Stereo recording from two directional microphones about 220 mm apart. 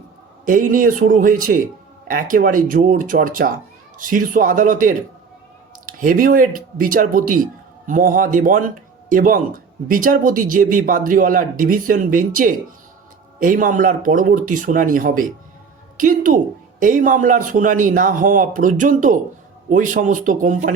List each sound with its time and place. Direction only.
0.4 s speech: 40° right (ahead or behind)